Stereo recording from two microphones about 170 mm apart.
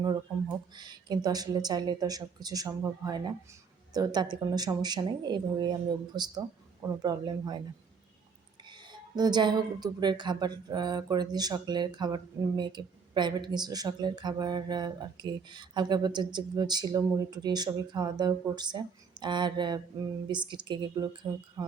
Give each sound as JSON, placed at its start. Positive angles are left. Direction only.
{"t": 0.8, "sound": "a woman's voice", "side_deg": -25}
{"t": 8.9, "sound": "a woman's voice", "side_deg": -25}